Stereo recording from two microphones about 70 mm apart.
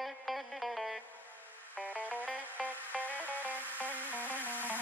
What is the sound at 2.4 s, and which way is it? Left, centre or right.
Music, right.